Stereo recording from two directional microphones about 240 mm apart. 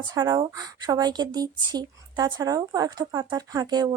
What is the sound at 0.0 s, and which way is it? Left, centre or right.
Speech, centre.